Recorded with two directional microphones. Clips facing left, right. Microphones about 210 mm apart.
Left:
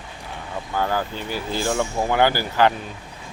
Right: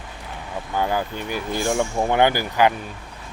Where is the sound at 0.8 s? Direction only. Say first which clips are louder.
Right 1 dB; 15° right (ahead or behind).